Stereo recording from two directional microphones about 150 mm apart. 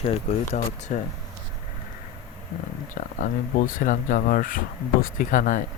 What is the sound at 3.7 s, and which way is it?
Speech, 60° left (ahead or behind).